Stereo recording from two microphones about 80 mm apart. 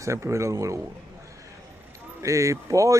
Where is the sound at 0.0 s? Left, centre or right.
Right.